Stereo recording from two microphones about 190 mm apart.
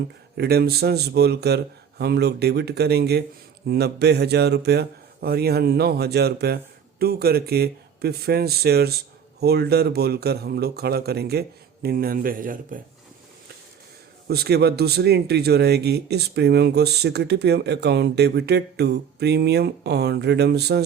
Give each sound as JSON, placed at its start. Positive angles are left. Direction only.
{"t": 0.3, "sound": "speech", "side_deg": -55}
{"t": 14.3, "sound": "speech", "side_deg": -55}